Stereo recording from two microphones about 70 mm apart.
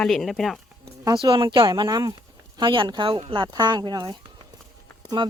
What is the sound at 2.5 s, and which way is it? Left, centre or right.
Speech, right.